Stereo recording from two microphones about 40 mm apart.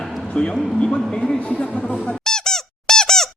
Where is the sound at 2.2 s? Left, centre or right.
Centre.